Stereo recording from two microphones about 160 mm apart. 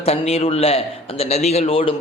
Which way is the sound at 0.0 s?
40° left (ahead or behind).